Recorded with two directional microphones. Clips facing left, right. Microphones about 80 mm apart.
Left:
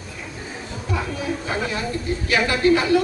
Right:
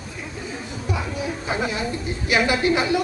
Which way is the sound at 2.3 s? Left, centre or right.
Centre.